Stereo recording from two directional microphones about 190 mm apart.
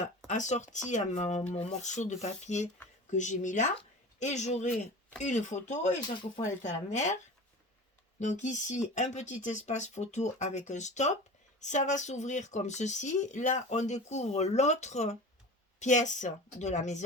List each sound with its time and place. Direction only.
0.3 s speech: 40° left (ahead or behind)
8.2 s speech: 40° left (ahead or behind)